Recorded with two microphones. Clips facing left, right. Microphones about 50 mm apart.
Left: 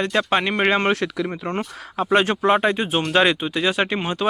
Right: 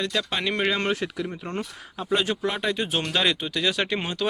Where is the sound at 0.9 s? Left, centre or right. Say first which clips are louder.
Left 5 dB; left.